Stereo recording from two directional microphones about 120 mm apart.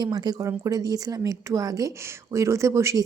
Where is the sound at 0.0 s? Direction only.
35° right (ahead or behind).